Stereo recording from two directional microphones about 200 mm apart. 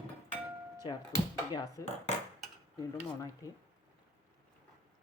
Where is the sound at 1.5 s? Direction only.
20° left (ahead or behind).